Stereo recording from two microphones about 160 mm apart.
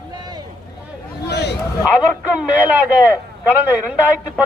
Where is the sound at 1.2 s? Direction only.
90° left.